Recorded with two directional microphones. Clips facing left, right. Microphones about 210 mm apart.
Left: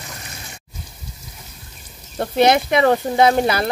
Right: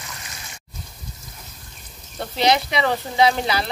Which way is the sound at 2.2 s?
55° left (ahead or behind).